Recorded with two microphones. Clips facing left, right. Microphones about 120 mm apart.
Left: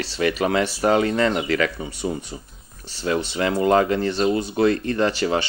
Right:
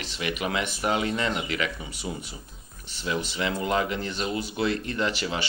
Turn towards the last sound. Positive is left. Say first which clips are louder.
# left 8 dB
turn(degrees=35)  # may be behind; listen again after turning